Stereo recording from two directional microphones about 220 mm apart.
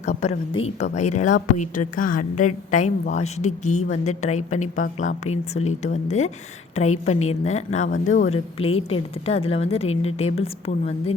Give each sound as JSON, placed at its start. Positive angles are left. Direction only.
{"t": 0.0, "sound": "a woman's voice", "side_deg": 30}